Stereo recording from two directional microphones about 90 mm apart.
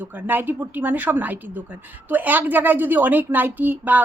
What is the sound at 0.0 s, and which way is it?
A woman's voice, 20° right (ahead or behind).